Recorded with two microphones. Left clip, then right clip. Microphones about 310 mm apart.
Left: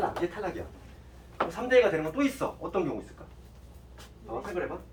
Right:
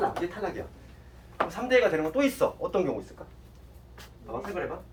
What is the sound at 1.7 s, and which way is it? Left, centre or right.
Speech, right.